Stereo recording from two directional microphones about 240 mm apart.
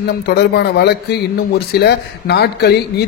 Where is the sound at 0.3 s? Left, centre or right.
Left.